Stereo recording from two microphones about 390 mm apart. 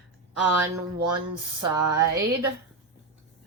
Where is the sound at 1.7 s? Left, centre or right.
Centre.